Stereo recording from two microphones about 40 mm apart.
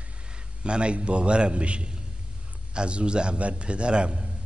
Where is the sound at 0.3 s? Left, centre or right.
Right.